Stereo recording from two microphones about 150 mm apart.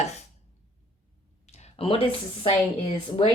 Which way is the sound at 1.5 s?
45° left (ahead or behind).